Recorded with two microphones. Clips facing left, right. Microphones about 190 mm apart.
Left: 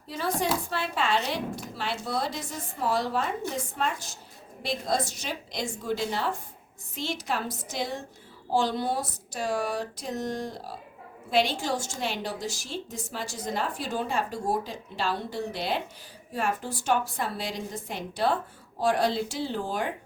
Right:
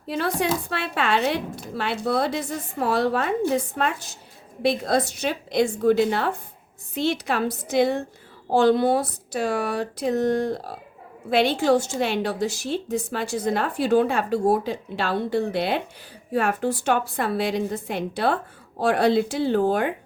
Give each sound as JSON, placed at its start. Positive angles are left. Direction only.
{"t": 0.1, "sound": "a woman's voice", "side_deg": -70}